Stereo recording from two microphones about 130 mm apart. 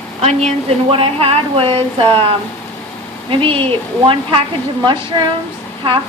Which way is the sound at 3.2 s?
45° right (ahead or behind).